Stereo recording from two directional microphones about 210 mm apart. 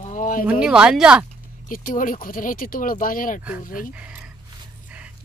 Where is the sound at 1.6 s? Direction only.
40° left (ahead or behind).